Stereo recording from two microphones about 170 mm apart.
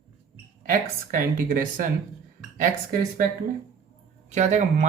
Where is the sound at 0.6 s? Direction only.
55° right (ahead or behind).